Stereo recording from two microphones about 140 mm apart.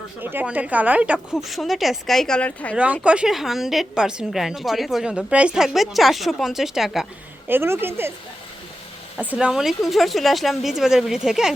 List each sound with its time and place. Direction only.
0.2 s a woman's voice: 15° right (ahead or behind); by 2.7 s 10° left (ahead or behind)
2.7 s a woman's voice: 10° right (ahead or behind)
7.4 s speech: 15° right (ahead or behind)
9.1 s a woman's voice: 10° right (ahead or behind)